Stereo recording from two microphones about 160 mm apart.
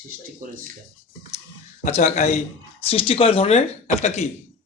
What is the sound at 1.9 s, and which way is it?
A man's voice, 45° left (ahead or behind).